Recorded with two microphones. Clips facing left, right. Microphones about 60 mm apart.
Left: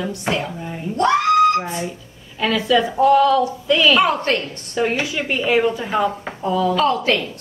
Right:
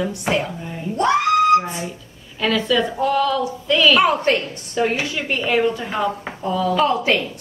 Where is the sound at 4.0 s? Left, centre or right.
Centre.